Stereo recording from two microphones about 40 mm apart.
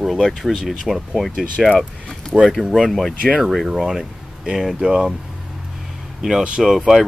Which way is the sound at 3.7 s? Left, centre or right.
Centre.